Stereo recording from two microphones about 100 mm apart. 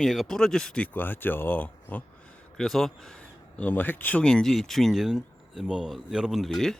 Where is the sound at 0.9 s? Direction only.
20° left (ahead or behind).